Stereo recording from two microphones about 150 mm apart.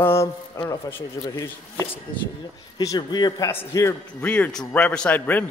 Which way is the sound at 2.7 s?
30° left (ahead or behind).